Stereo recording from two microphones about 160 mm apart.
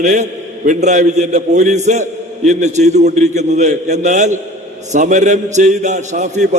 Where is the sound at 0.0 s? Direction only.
50° right (ahead or behind).